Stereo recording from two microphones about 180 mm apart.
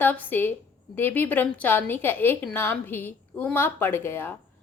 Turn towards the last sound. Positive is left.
turn(degrees=15)  # may be behind; listen again after turning